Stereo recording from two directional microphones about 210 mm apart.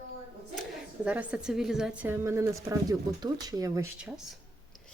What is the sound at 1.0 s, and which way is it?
A woman's voice, 5° right (ahead or behind).